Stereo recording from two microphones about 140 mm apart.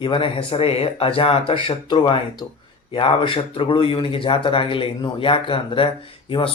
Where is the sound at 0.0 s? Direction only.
40° left (ahead or behind).